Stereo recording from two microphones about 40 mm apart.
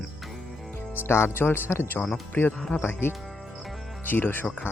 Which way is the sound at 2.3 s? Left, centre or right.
Left.